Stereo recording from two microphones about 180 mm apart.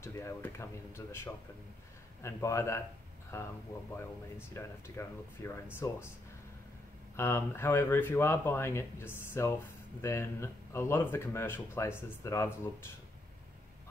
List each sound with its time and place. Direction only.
0.0 s speech: 15° left (ahead or behind)
7.2 s speech: 15° left (ahead or behind)